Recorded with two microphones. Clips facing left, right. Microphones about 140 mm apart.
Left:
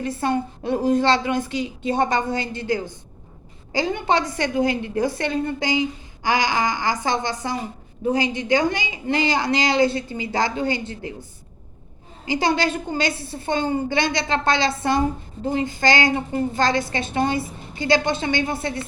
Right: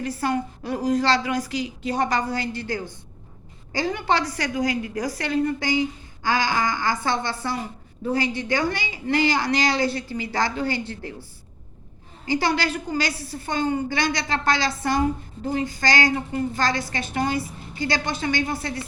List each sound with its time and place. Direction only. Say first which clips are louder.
0.0 s a woman's voice: left 2 dB; 25° left (ahead or behind)
12.3 s a woman's voice: left 2 dB; 20° left (ahead or behind)